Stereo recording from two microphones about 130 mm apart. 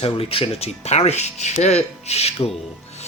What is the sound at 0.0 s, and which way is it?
Speech, 45° left (ahead or behind).